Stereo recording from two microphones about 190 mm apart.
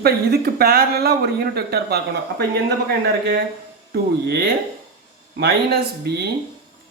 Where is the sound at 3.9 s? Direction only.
55° right (ahead or behind).